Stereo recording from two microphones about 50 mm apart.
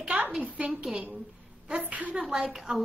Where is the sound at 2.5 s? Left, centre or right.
Centre.